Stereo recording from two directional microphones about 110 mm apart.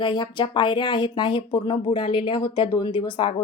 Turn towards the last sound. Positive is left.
turn(degrees=45)  # may be behind; listen again after turning